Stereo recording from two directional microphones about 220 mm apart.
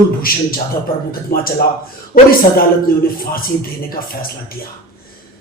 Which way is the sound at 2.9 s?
40° left (ahead or behind).